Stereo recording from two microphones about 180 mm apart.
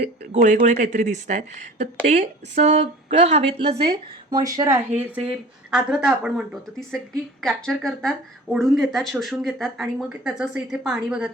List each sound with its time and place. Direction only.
0.0 s speech: 40° right (ahead or behind); by 11.3 s 5° right (ahead or behind)